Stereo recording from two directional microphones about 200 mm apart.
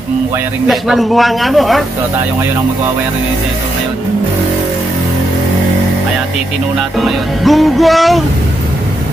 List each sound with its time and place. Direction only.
0.7 s music: centre (ahead or behind)
7.0 s music: centre (ahead or behind)